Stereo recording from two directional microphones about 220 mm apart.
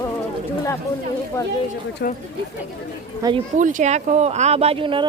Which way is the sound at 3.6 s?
35° right (ahead or behind).